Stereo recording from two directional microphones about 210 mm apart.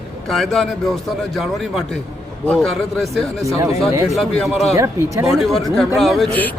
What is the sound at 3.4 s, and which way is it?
Speech, 15° right (ahead or behind).